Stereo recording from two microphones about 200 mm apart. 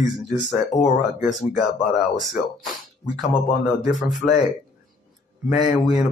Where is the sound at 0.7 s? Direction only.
35° left (ahead or behind).